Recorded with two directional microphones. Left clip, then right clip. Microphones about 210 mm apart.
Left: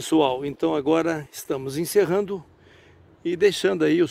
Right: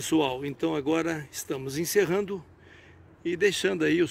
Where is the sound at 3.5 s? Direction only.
25° left (ahead or behind).